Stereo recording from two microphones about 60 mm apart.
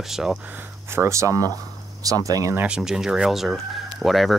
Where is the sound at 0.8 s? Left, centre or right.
Right.